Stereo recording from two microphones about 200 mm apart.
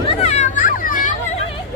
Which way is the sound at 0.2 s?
35° left (ahead or behind).